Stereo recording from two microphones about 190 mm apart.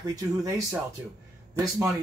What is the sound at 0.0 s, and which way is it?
Speech, 15° right (ahead or behind).